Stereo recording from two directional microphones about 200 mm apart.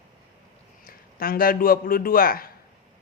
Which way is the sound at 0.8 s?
45° left (ahead or behind).